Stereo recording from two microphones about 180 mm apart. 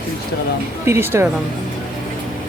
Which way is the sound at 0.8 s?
15° right (ahead or behind).